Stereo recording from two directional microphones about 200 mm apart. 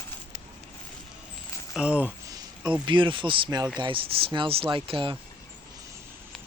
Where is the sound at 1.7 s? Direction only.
5° right (ahead or behind).